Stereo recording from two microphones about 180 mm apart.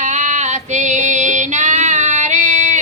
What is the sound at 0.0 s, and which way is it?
Female singing, 40° right (ahead or behind).